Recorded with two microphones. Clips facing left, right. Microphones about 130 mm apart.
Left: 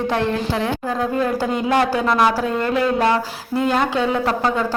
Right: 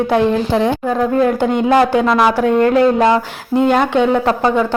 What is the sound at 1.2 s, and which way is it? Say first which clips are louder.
Speech: right 6 dB; 30° right (ahead or behind).